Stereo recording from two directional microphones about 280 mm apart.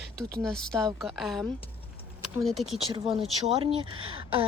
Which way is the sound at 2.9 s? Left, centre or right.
Centre.